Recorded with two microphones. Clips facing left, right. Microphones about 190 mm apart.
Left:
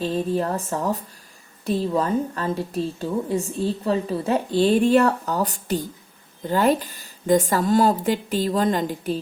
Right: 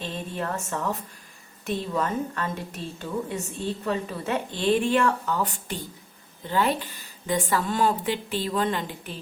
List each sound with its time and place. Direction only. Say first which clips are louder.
0.0 s a woman's voice: left 9 dB; 35° left (ahead or behind)